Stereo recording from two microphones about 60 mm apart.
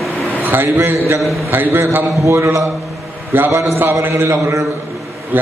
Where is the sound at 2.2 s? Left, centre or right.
Right.